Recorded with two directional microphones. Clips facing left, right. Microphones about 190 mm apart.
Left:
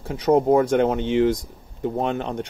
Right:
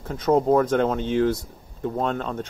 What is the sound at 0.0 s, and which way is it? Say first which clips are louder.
Speech: left 2 dB; 10° left (ahead or behind).